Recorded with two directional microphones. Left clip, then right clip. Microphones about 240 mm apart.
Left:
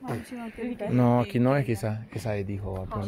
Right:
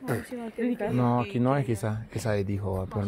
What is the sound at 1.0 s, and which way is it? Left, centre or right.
Speech, left.